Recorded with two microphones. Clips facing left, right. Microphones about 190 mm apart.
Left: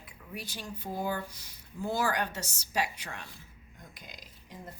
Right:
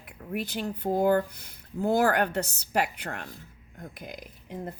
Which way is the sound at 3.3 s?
50° right (ahead or behind).